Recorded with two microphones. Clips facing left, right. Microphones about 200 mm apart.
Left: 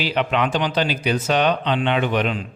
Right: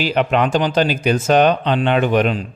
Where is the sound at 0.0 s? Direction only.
45° right (ahead or behind).